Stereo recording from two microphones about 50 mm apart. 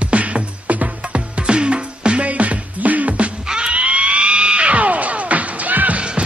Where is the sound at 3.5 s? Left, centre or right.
Centre.